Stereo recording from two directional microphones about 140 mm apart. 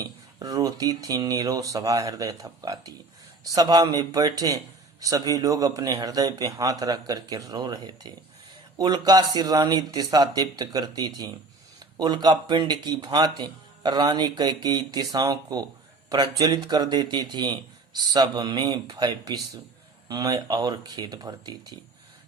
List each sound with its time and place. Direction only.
0.0 s a man's voice: 25° right (ahead or behind)